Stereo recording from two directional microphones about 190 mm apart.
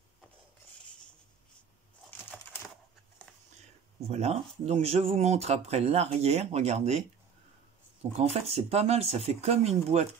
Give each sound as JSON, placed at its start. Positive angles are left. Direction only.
{"t": 4.1, "sound": "speech", "side_deg": -35}
{"t": 8.2, "sound": "speech", "side_deg": -35}